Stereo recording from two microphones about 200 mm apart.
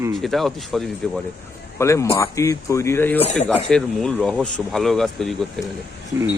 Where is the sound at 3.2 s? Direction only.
35° left (ahead or behind).